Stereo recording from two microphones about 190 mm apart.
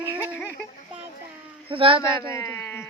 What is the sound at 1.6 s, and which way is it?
Speech, 30° right (ahead or behind).